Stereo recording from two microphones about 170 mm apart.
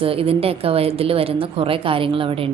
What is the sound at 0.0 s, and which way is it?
A woman's voice, 35° right (ahead or behind).